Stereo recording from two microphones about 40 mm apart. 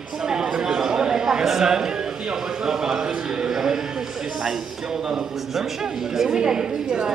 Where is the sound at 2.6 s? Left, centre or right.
Centre.